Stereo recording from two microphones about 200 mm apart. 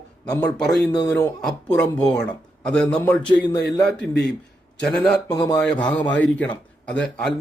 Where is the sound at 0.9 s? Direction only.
20° left (ahead or behind).